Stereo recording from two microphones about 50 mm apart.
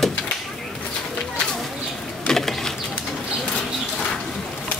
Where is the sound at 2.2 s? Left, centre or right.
Centre.